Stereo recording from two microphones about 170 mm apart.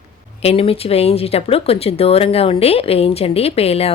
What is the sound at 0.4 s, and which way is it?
Speech, 35° left (ahead or behind).